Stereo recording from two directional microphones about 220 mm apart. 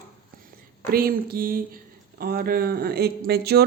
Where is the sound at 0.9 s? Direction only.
40° right (ahead or behind).